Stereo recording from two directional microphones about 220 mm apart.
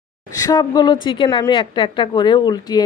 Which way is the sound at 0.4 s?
15° left (ahead or behind).